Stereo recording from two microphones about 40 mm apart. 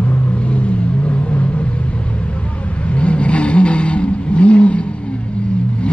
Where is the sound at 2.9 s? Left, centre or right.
Left.